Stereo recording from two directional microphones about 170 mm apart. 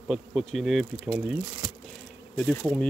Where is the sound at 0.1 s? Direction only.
Centre (ahead or behind).